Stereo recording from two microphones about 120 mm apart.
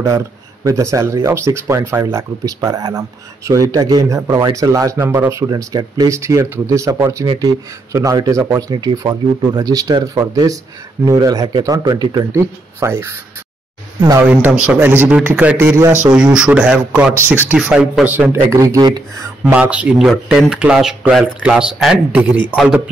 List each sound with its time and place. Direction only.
0.7 s speech: 25° right (ahead or behind)
12.8 s speech: 20° right (ahead or behind)
14.2 s speech: 10° right (ahead or behind)
16.0 s speech: 10° right (ahead or behind)
18.5 s speech: 25° right (ahead or behind)
19.4 s speech: 10° right (ahead or behind)